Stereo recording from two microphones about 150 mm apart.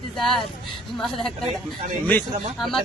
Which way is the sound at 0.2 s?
Centre (ahead or behind).